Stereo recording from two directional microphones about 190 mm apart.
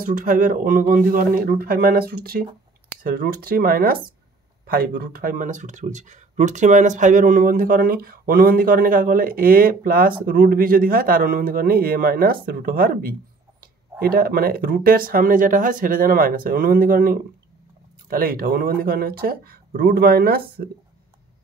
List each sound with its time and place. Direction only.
0.0 s speech: 45° right (ahead or behind)